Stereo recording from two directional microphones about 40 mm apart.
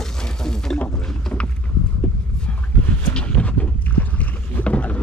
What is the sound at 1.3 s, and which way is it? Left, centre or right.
Vehicle, left.